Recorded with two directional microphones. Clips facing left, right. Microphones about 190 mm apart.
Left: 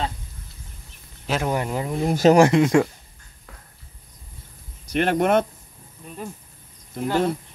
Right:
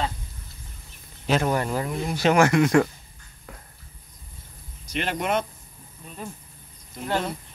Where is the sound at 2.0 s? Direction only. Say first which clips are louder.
Left 7 dB; 45° left (ahead or behind).